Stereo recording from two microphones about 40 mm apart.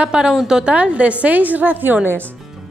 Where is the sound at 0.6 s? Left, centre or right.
Right.